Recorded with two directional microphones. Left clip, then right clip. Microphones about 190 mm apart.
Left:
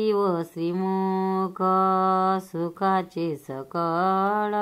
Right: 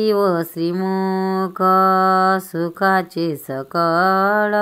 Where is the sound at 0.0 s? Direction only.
25° right (ahead or behind).